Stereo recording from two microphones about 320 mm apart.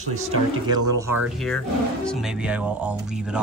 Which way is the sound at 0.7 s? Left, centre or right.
Centre.